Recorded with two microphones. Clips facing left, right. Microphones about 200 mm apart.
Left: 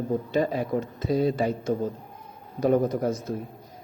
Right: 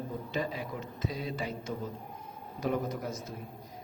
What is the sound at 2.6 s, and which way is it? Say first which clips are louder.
Speech: left 10 dB; 45° left (ahead or behind).